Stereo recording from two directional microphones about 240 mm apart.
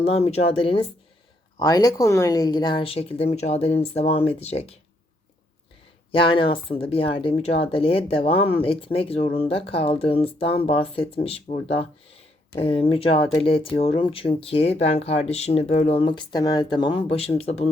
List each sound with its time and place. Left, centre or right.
0.0 s speech: left
6.1 s speech: left